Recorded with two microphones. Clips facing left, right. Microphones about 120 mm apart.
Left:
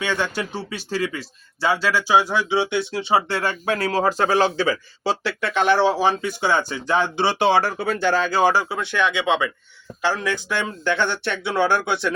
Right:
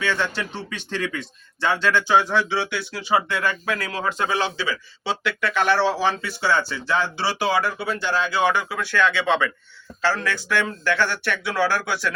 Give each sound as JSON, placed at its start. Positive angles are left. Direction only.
{"t": 0.0, "sound": "speech", "side_deg": 15}
{"t": 5.4, "sound": "speech", "side_deg": 25}
{"t": 7.8, "sound": "speech", "side_deg": 50}